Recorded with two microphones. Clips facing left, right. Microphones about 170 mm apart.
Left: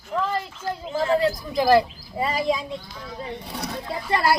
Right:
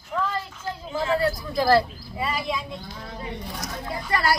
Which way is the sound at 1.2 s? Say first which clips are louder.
Left 2 dB; 15° left (ahead or behind).